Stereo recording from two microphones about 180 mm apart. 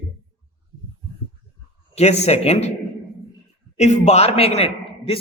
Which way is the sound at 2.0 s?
35° left (ahead or behind).